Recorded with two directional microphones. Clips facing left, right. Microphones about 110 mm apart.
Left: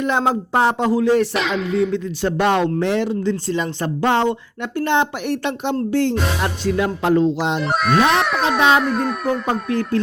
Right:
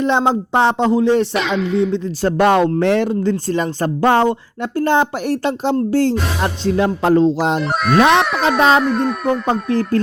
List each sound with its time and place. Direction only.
0.0 s speech: 25° right (ahead or behind)
1.3 s music: centre (ahead or behind)
2.2 s speech: 45° right (ahead or behind)
5.9 s music: 35° right (ahead or behind)
7.6 s music: centre (ahead or behind)
9.5 s music: 35° right (ahead or behind)